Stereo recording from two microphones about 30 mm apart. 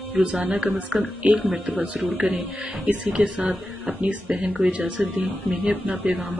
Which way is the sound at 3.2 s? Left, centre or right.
Right.